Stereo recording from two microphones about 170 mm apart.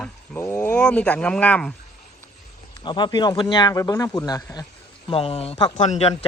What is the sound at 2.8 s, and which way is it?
A man's voice, 25° left (ahead or behind).